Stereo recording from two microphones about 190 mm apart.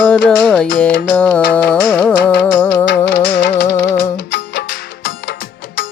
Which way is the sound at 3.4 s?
55° left (ahead or behind).